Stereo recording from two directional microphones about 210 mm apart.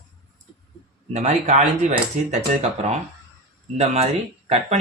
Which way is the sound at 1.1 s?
35° right (ahead or behind).